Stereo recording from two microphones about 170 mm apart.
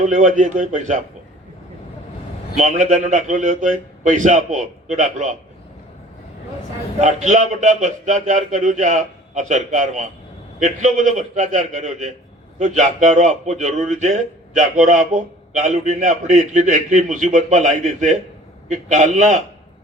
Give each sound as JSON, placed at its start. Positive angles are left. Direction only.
{"t": 0.0, "sound": "a man's voice", "side_deg": -50}
{"t": 2.6, "sound": "a man's voice", "side_deg": -45}
{"t": 7.0, "sound": "a man's voice", "side_deg": -45}